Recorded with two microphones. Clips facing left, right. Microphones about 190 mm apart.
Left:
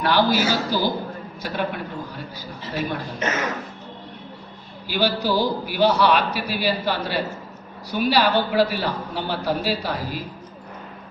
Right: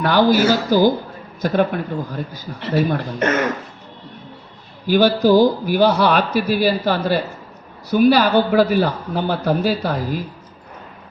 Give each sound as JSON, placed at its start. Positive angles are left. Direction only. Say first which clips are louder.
{"t": 0.0, "sound": "a man's voice", "louder": "right 5 dB", "side_deg": -50}
{"t": 2.6, "sound": "a man's voice", "louder": "right 10 dB", "side_deg": -70}
{"t": 3.2, "sound": "speech", "louder": "right 7 dB", "side_deg": -55}
{"t": 4.9, "sound": "a man's voice", "louder": "right 9 dB", "side_deg": -45}